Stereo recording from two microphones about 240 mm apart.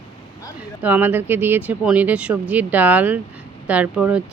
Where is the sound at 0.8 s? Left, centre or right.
Centre.